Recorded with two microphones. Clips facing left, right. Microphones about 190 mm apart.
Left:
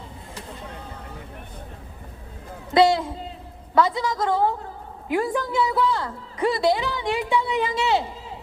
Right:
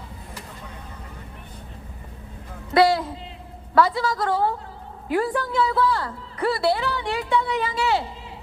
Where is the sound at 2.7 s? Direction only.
20° left (ahead or behind).